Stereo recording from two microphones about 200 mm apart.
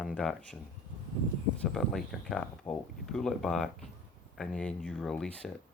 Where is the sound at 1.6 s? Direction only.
Centre (ahead or behind).